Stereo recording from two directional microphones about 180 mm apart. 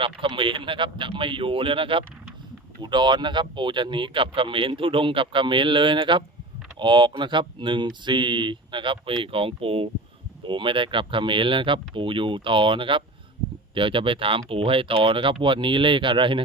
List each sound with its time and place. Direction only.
0.0 s speech: 30° right (ahead or behind)